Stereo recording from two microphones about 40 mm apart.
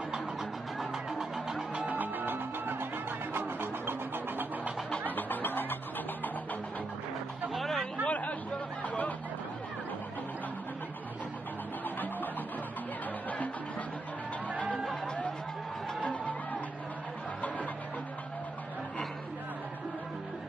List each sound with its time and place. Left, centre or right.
1.9 s music: right
5.1 s music: left
7.5 s music: centre
8.0 s chatter: left
8.8 s music: left
16.0 s music: left